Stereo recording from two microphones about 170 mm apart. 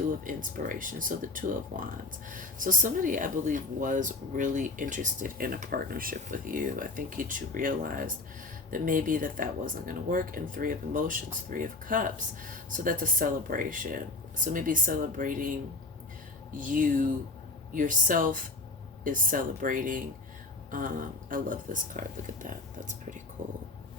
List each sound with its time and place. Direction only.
0.3 s speech: 50° right (ahead or behind)
16.6 s speech: 50° right (ahead or behind)